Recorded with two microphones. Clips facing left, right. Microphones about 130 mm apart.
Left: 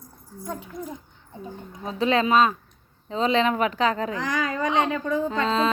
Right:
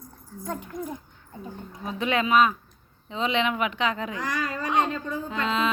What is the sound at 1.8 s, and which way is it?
A woman's voice, 30° left (ahead or behind).